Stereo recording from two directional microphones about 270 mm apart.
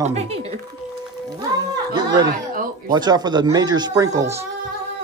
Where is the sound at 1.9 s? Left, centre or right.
Centre.